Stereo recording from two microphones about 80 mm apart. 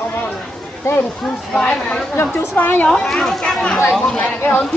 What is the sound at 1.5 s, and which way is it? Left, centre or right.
Speech, centre.